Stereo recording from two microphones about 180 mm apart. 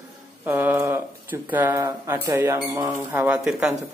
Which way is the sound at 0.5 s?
10° right (ahead or behind).